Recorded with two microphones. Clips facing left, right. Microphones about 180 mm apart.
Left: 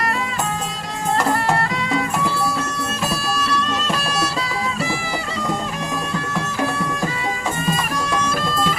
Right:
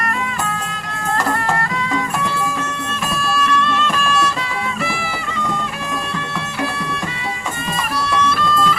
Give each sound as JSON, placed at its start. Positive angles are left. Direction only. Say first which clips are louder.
{"t": 3.1, "sound": "music", "louder": "right 7 dB", "side_deg": 35}
{"t": 8.3, "sound": "music", "louder": "right 3 dB", "side_deg": 40}